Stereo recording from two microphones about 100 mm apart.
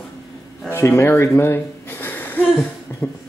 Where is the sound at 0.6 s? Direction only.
25° left (ahead or behind).